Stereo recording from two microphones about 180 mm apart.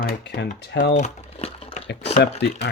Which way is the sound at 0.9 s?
40° left (ahead or behind).